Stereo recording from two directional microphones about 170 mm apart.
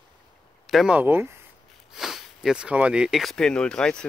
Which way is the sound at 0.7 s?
5° right (ahead or behind).